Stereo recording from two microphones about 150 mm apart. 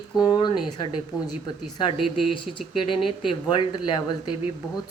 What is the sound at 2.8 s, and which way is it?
Speech, 35° left (ahead or behind).